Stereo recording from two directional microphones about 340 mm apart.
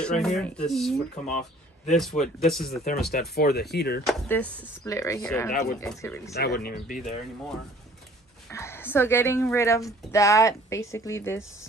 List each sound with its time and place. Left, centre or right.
0.0 s speech: centre
2.0 s speech: centre
2.8 s speech: left
4.0 s speech: centre
5.5 s speech: left
5.8 s a woman's voice: centre
6.3 s speech: left
8.5 s a woman's voice: centre